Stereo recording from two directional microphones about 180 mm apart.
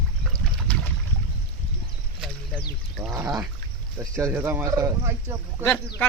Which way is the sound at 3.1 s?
15° right (ahead or behind).